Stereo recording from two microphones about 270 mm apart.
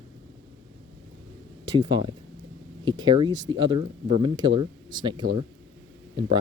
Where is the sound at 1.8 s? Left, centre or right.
Centre.